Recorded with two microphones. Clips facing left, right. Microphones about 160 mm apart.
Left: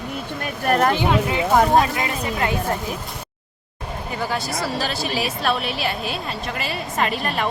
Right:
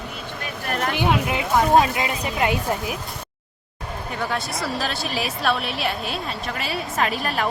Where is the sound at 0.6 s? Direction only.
40° left (ahead or behind).